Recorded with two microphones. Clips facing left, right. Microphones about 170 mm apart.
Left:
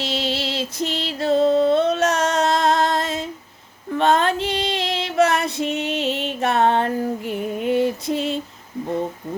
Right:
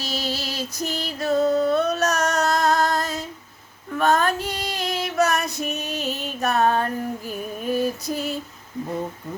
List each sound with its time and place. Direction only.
0.0 s music: 25° left (ahead or behind)
3.9 s female singing: 25° left (ahead or behind)